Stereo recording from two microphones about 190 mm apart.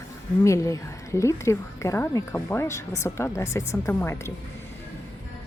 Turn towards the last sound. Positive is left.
turn(degrees=15)  # may be behind; listen again after turning